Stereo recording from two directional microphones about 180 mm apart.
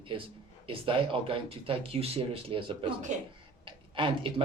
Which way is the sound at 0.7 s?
30° right (ahead or behind).